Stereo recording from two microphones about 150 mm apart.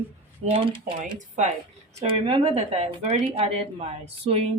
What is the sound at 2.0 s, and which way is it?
Speech, 35° right (ahead or behind).